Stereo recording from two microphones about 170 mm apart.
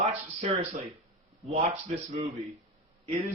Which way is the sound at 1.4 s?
40° right (ahead or behind).